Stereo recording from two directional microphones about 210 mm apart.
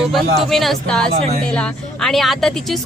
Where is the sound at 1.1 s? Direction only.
30° right (ahead or behind).